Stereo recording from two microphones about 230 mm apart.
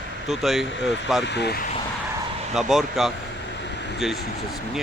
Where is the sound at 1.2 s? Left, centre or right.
Left.